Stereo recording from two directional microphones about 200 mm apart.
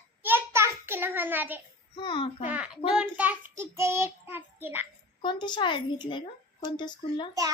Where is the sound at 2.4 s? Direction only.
5° right (ahead or behind).